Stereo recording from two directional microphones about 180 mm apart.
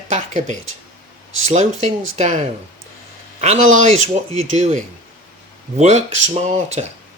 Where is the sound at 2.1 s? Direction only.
40° right (ahead or behind).